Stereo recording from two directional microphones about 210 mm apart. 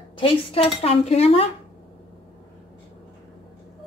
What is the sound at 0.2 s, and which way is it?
Speech, 25° left (ahead or behind).